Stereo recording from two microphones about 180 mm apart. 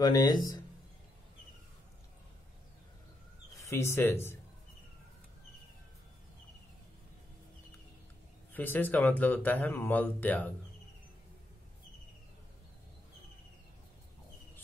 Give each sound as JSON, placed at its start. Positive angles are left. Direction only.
{"t": 0.0, "sound": "speech", "side_deg": 20}
{"t": 3.6, "sound": "speech", "side_deg": 15}
{"t": 8.5, "sound": "speech", "side_deg": 10}